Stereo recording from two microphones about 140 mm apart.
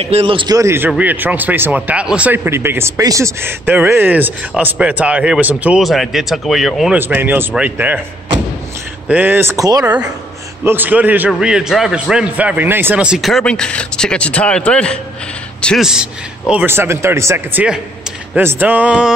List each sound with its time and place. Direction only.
0.0 s a man's voice: 45° right (ahead or behind)
0.5 s speech: 20° right (ahead or behind); by 7.0 s centre (ahead or behind)
7.0 s speech: 15° right (ahead or behind)
9.1 s speech: 15° right (ahead or behind)
9.8 s a man's voice: 10° right (ahead or behind)